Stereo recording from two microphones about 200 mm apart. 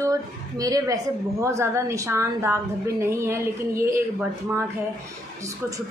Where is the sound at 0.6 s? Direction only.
15° right (ahead or behind).